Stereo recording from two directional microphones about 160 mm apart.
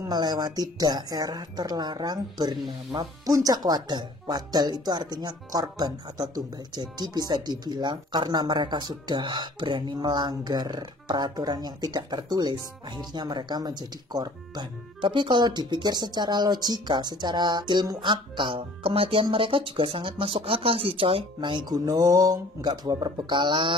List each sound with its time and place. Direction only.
0.0 s speech: 25° right (ahead or behind)